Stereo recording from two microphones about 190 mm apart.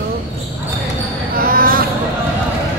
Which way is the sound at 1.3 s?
50° right (ahead or behind).